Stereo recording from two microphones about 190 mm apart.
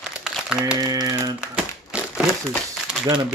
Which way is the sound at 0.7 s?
20° right (ahead or behind).